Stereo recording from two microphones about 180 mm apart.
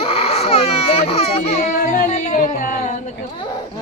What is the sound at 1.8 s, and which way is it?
Speech, 50° left (ahead or behind).